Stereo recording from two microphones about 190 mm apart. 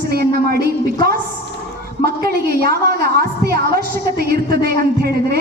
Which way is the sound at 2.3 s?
55° right (ahead or behind).